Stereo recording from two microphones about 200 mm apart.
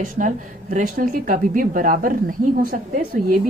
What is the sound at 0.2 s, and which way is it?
A woman's voice, 40° right (ahead or behind).